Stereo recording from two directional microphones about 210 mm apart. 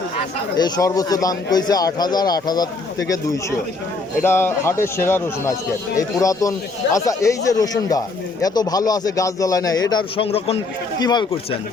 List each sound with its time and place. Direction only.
0.5 s speech: 15° left (ahead or behind)
4.2 s speech: 10° left (ahead or behind)